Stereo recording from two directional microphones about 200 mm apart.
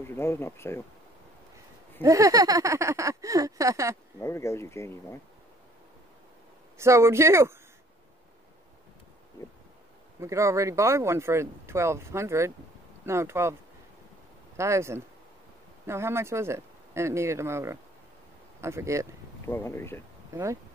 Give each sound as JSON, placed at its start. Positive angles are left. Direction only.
{"t": 0.0, "sound": "speech", "side_deg": 10}
{"t": 2.0, "sound": "speech", "side_deg": -15}
{"t": 4.2, "sound": "speech", "side_deg": 15}
{"t": 6.8, "sound": "speech", "side_deg": -15}
{"t": 10.2, "sound": "speech", "side_deg": -15}
{"t": 14.6, "sound": "speech", "side_deg": -15}
{"t": 19.4, "sound": "speech", "side_deg": 10}